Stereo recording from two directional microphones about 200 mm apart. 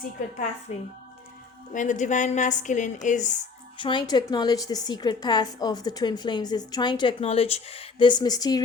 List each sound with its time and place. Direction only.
0.7 s a woman's voice: 30° left (ahead or behind)
3.8 s a woman's voice: 25° left (ahead or behind)